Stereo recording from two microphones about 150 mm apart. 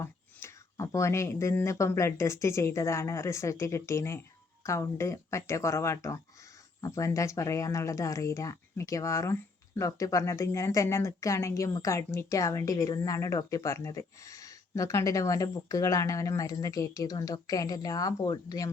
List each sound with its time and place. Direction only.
0.0 s speech: 20° left (ahead or behind)